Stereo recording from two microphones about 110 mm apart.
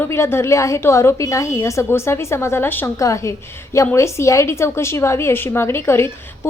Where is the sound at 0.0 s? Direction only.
20° left (ahead or behind).